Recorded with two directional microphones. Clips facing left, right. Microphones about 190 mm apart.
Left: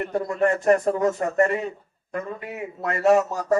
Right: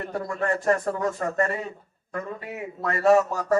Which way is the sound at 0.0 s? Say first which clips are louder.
Left 6 dB; 20° left (ahead or behind).